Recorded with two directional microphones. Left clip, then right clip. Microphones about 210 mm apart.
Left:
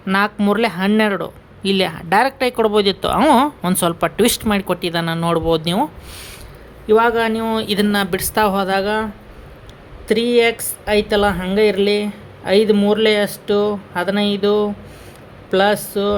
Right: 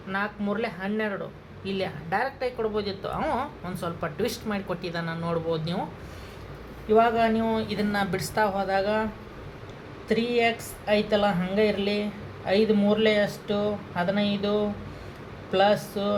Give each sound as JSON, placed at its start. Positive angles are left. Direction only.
{"t": 0.1, "sound": "speech", "side_deg": 50}
{"t": 6.8, "sound": "speech", "side_deg": 55}
{"t": 10.1, "sound": "speech", "side_deg": 55}